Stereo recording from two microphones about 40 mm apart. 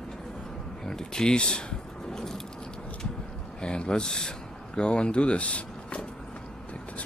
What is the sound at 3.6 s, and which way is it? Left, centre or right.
Speech, left.